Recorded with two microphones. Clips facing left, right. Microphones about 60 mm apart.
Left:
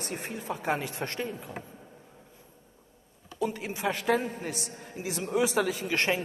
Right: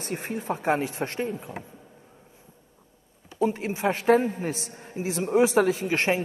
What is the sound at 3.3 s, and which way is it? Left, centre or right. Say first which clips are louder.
A man's voice: right 6 dB; right.